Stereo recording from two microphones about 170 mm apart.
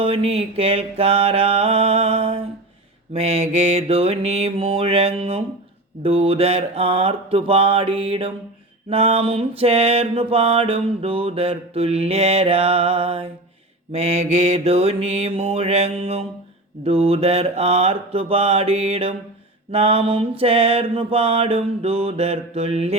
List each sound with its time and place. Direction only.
0.0 s mantra: 35° right (ahead or behind)